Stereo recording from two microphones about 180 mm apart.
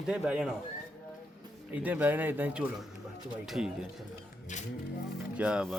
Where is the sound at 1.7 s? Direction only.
10° right (ahead or behind).